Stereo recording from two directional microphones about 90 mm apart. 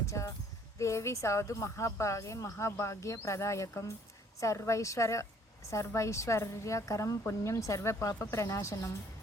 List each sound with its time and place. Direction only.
0.0 s a woman's voice: 35° left (ahead or behind)